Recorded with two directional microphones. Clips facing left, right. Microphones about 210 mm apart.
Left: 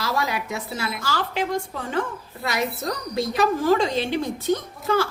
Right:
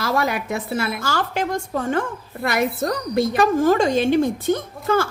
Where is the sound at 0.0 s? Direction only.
55° right (ahead or behind).